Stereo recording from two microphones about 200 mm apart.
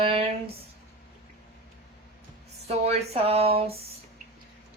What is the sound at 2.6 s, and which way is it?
Speech, 30° right (ahead or behind).